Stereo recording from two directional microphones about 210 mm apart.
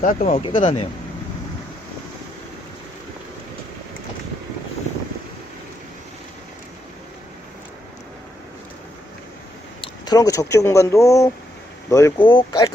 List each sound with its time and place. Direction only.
0.0 s speech: 35° left (ahead or behind)
9.8 s speech: 20° left (ahead or behind)